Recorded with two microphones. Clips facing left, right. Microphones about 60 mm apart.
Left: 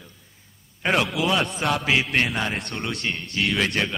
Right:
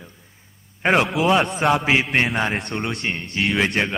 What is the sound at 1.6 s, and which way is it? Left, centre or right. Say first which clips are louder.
Speech: right 4 dB; right.